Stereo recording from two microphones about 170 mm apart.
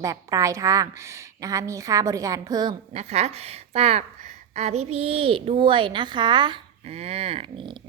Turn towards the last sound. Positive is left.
turn(degrees=-30)  # may be behind; listen again after turning